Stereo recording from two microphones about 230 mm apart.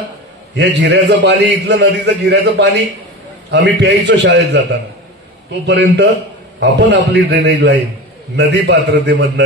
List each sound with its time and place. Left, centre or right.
0.6 s a man's voice: right